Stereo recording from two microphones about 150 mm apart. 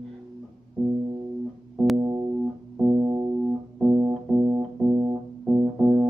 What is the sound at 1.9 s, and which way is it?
Music, 20° right (ahead or behind).